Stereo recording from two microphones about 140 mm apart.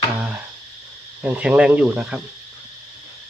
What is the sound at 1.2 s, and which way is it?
Speech, 10° right (ahead or behind).